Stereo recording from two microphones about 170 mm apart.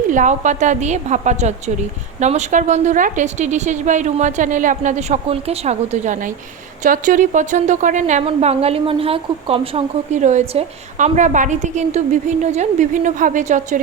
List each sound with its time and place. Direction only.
0.1 s a woman's voice: 45° right (ahead or behind)
8.2 s a woman's voice: 35° right (ahead or behind)